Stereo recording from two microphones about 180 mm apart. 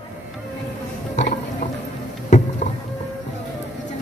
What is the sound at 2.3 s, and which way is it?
Music, 40° left (ahead or behind).